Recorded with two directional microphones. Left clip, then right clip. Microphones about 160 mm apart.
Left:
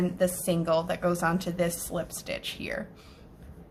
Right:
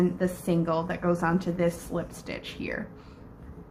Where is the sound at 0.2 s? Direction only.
25° left (ahead or behind).